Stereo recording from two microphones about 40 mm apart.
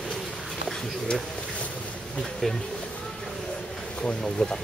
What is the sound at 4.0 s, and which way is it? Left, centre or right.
Speech, left.